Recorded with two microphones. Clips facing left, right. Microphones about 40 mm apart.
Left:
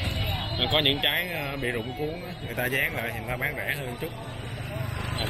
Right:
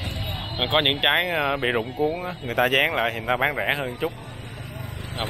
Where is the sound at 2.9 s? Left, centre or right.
Right.